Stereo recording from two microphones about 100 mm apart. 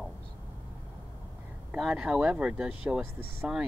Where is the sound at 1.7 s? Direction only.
10° right (ahead or behind).